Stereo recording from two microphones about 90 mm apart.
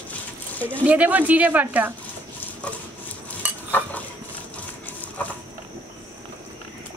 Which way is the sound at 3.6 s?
20° left (ahead or behind).